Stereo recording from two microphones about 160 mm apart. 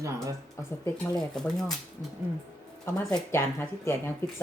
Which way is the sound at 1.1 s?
5° left (ahead or behind).